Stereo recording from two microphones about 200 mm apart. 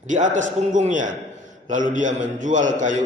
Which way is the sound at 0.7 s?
40° right (ahead or behind).